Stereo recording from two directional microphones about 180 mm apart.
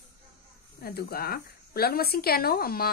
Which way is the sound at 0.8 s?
60° left (ahead or behind).